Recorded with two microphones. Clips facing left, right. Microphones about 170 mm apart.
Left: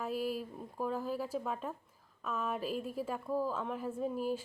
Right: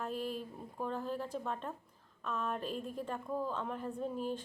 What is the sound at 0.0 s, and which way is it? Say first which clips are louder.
A woman's voice: left 3 dB; 5° left (ahead or behind).